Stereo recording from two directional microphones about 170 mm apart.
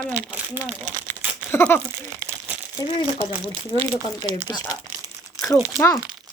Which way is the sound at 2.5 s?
10° right (ahead or behind).